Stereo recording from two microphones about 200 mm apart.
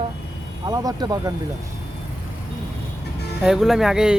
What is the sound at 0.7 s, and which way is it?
Speech, 20° right (ahead or behind).